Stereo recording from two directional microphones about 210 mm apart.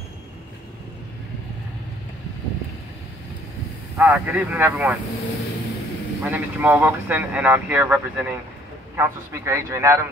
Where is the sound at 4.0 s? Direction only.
5° right (ahead or behind).